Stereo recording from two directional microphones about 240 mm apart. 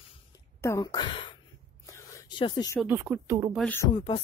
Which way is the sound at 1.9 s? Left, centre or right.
Centre.